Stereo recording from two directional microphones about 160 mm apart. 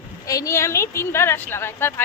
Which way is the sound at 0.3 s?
20° left (ahead or behind).